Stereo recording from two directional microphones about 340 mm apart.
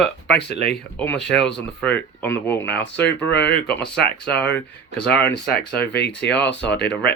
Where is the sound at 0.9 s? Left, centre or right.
Centre.